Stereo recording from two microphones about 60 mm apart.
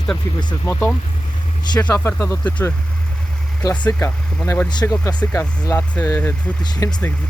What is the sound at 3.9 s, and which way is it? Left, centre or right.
Speech, left.